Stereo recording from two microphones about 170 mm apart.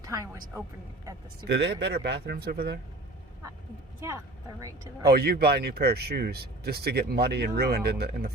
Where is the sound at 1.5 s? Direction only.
90° right; by 2.7 s 70° right (ahead or behind).